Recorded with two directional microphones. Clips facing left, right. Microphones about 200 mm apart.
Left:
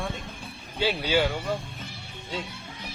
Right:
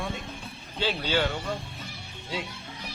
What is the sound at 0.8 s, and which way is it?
Speech, 10° left (ahead or behind).